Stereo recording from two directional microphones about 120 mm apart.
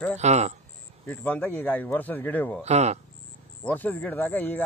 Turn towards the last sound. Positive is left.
turn(degrees=15)  # may be behind; listen again after turning